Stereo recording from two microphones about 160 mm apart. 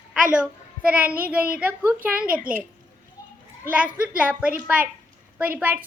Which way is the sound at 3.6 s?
10° right (ahead or behind).